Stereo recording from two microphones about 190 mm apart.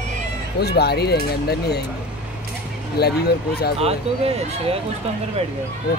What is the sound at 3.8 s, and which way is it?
Speech, 30° right (ahead or behind).